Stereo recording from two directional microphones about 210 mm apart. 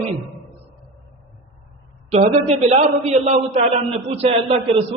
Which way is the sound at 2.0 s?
30° right (ahead or behind).